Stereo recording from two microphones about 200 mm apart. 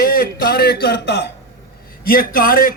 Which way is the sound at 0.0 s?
45° left (ahead or behind).